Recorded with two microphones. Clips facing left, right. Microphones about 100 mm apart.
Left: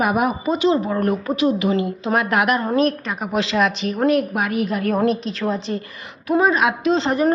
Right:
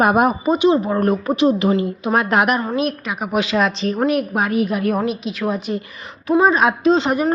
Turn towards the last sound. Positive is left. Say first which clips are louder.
# right 2 dB
turn(degrees=-15)  # may be behind; listen again after turning